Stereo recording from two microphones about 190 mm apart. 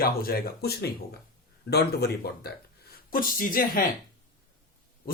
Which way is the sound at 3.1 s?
45° left (ahead or behind).